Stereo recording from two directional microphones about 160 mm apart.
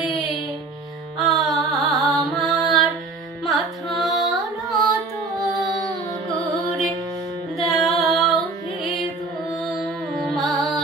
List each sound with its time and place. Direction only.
1.1 s music: centre (ahead or behind)
3.4 s carnatic music: centre (ahead or behind)
6.3 s music: centre (ahead or behind)
9.6 s music: centre (ahead or behind)